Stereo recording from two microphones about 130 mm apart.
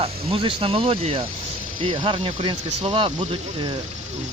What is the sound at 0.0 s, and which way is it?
Speech, 45° right (ahead or behind).